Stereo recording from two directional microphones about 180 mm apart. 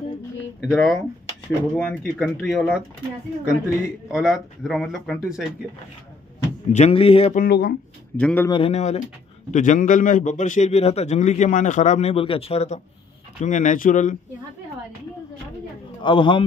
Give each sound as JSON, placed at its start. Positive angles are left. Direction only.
{"t": 0.6, "sound": "speech", "side_deg": 0}
{"t": 2.0, "sound": "speech", "side_deg": 0}
{"t": 6.7, "sound": "a man's voice", "side_deg": 35}
{"t": 7.3, "sound": "speech", "side_deg": 60}
{"t": 8.2, "sound": "a man's voice", "side_deg": 5}
{"t": 8.5, "sound": "a man's voice", "side_deg": 30}
{"t": 16.0, "sound": "a man's voice", "side_deg": 25}